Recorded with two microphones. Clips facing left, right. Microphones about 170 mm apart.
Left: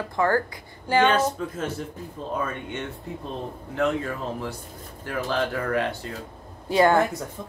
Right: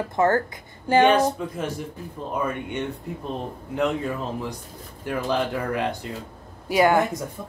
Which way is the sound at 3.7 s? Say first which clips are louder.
Right 1 dB; 15° right (ahead or behind).